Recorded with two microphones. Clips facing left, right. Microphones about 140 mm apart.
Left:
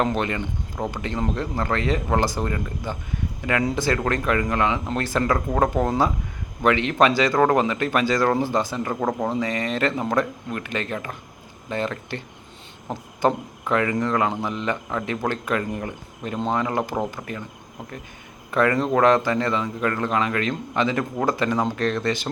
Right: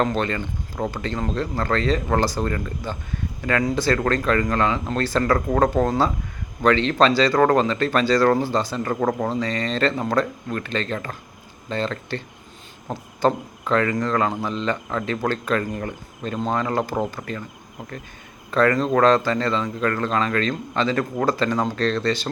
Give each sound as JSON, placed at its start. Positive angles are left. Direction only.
{"t": 0.0, "sound": "speech", "side_deg": 15}
{"t": 18.5, "sound": "speech", "side_deg": 20}